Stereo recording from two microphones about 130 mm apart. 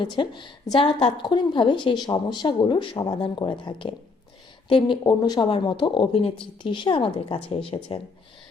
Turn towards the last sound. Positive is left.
turn(degrees=45)  # may be behind; listen again after turning